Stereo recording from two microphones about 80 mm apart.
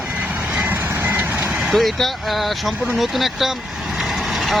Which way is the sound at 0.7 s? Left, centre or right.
Right.